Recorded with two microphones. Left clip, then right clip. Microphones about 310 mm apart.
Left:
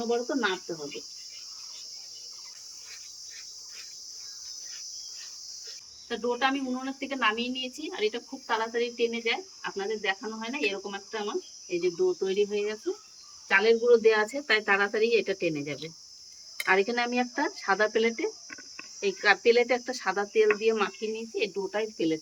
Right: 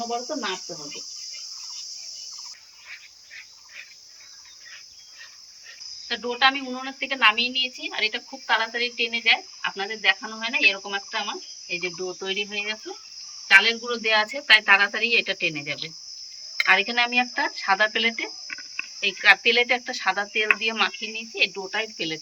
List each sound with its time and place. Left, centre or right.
6.1 s a woman's voice: centre